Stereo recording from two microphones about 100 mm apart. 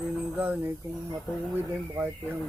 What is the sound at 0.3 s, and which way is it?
Speech, 15° right (ahead or behind).